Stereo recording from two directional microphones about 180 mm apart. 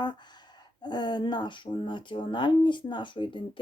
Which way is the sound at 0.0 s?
25° left (ahead or behind).